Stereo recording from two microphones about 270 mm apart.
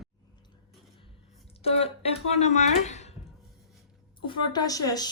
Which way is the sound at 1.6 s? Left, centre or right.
Left.